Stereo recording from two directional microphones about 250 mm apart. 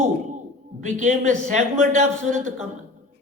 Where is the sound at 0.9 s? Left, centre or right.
Right.